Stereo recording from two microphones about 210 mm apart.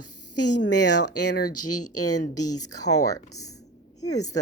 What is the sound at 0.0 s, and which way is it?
Speech, 90° left.